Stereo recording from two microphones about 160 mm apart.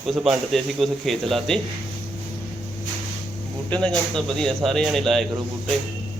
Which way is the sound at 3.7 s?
5° left (ahead or behind).